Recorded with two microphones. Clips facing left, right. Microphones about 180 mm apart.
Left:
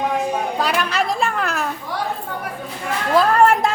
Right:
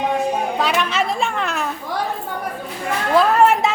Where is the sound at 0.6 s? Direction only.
Centre (ahead or behind).